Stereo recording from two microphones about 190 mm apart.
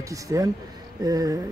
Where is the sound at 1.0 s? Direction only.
20° right (ahead or behind).